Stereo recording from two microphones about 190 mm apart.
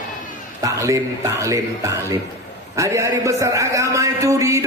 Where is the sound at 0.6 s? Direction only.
15° right (ahead or behind).